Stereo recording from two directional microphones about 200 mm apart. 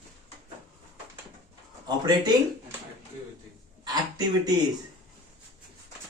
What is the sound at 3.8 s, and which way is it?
Speech, 20° right (ahead or behind).